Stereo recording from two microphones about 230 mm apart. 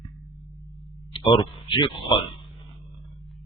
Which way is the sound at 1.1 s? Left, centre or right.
Left.